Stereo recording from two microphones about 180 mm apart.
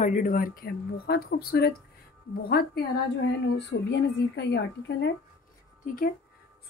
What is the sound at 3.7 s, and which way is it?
Speech, 70° left (ahead or behind).